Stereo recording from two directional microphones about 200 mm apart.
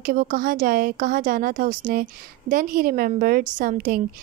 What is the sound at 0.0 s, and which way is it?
Speech, 45° right (ahead or behind).